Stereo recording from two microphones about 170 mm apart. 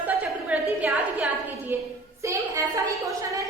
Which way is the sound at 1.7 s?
10° right (ahead or behind).